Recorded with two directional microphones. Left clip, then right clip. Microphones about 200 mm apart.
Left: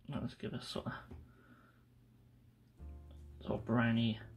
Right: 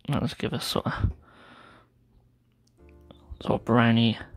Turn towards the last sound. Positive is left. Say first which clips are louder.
# right 13 dB
turn(degrees=-50)  # may be behind; listen again after turning